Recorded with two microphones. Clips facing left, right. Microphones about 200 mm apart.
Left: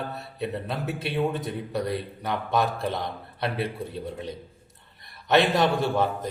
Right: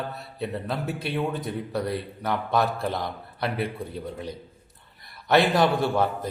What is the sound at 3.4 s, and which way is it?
Speech, centre (ahead or behind).